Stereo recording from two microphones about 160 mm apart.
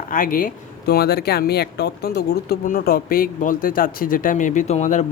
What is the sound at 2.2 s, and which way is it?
Speech, 80° left.